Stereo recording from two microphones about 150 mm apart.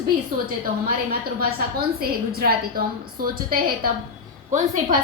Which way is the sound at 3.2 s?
70° right (ahead or behind).